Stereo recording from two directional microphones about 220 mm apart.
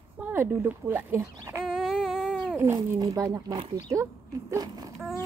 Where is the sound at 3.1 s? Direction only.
20° right (ahead or behind).